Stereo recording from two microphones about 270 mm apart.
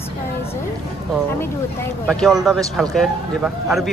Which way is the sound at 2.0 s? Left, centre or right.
Centre.